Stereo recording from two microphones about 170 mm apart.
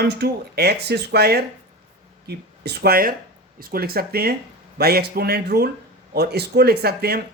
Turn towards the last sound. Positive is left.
turn(degrees=-65)  # may be behind; listen again after turning